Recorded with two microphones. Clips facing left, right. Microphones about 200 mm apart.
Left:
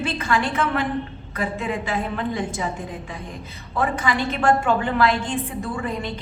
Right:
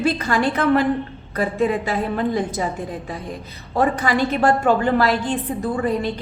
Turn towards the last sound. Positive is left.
turn(degrees=-35)  # may be behind; listen again after turning